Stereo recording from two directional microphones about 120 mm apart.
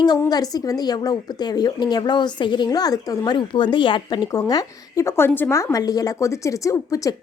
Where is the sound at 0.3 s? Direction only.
35° left (ahead or behind).